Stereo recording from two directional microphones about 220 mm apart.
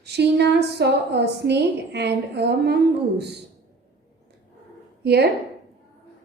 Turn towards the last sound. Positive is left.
turn(degrees=-45)  # may be behind; listen again after turning